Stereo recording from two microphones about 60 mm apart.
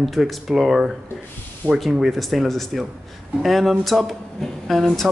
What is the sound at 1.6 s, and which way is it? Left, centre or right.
Speech, right.